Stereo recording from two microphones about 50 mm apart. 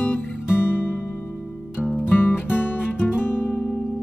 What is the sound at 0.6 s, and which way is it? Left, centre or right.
Music, left.